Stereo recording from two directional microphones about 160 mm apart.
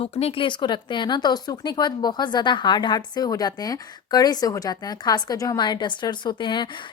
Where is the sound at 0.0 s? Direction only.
40° left (ahead or behind).